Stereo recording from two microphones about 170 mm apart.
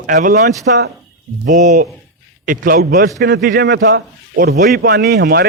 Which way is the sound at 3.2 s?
70° right (ahead or behind).